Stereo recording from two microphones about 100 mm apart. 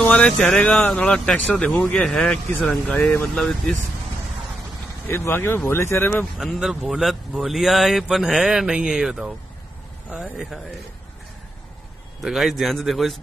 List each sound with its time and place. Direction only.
0.1 s speech: 10° left (ahead or behind)
5.0 s speech: 20° left (ahead or behind)
6.3 s speech: centre (ahead or behind)
12.2 s speech: centre (ahead or behind)